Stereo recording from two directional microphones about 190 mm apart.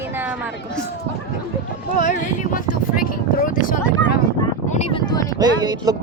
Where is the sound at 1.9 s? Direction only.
45° left (ahead or behind).